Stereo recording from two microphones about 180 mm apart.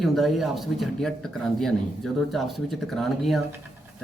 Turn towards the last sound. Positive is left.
turn(degrees=0)  # may be behind; listen again after turning